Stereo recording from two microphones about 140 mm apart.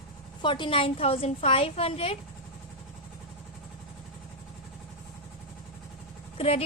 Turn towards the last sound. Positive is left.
turn(degrees=45)  # may be behind; listen again after turning